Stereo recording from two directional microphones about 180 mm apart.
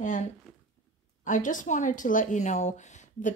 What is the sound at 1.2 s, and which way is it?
A woman's voice, 45° left (ahead or behind).